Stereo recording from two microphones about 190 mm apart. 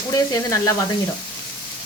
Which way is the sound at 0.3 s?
20° left (ahead or behind).